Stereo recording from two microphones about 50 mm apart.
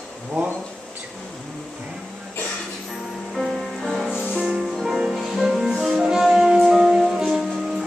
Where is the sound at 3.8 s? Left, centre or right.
Centre.